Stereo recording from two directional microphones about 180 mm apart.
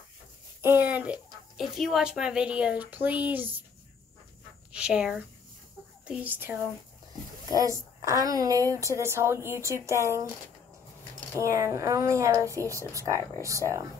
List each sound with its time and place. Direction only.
0.6 s a sound: 10° right (ahead or behind)
1.6 s a woman's voice: centre (ahead or behind)
4.7 s a woman's voice: 5° right (ahead or behind)
11.3 s a woman's voice: 15° right (ahead or behind)